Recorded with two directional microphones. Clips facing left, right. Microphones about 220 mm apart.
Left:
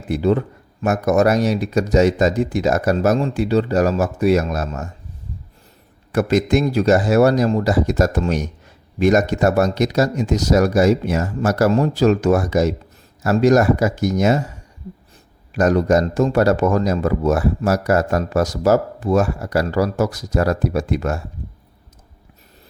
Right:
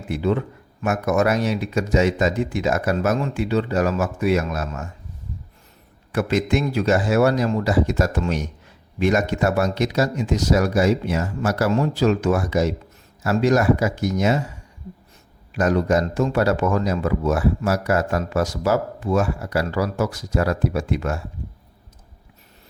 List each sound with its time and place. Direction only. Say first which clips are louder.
0.1 s speech: left 4 dB; 40° left (ahead or behind)
6.1 s speech: left 4 dB; 40° left (ahead or behind)
15.5 s speech: left 4 dB; 40° left (ahead or behind)